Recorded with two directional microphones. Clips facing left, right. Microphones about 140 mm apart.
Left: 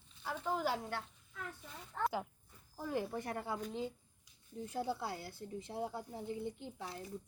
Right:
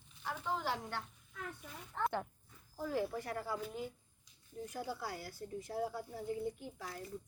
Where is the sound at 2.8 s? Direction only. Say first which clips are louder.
Right 1 dB; 20° left (ahead or behind).